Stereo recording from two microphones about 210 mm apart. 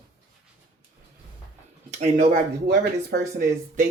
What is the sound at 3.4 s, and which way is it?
Speech, 40° right (ahead or behind).